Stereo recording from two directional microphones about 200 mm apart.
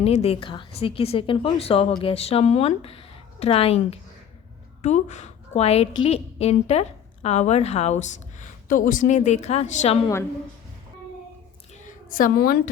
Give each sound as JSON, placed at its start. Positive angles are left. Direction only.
{"t": 0.0, "sound": "a woman's voice", "side_deg": 30}
{"t": 11.9, "sound": "a woman's voice", "side_deg": 45}